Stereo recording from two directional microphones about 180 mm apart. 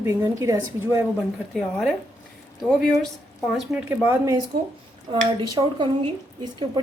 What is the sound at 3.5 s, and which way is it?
Speech, centre (ahead or behind).